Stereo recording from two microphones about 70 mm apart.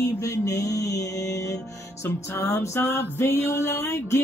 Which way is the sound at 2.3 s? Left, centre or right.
Left.